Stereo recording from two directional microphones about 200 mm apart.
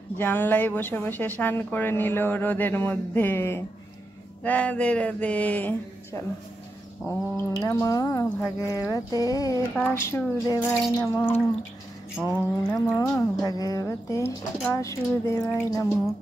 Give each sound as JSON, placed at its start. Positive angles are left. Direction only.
{"t": 0.2, "sound": "speech", "side_deg": 10}
{"t": 7.6, "sound": "speech", "side_deg": 15}
{"t": 12.2, "sound": "a sound", "side_deg": -10}
{"t": 13.1, "sound": "speech", "side_deg": 15}